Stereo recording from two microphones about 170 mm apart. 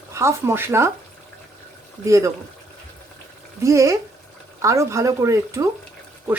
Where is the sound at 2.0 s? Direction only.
15° right (ahead or behind).